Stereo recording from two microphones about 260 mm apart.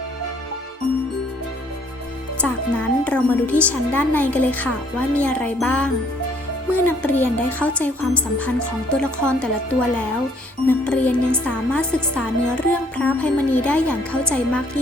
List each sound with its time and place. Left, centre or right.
2.4 s speech: centre